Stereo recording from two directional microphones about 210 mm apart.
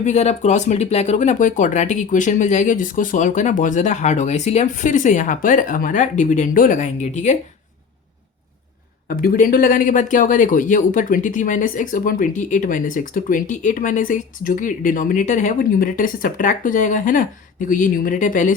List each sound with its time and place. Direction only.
0.0 s speech: 35° left (ahead or behind)
9.0 s speech: 40° left (ahead or behind)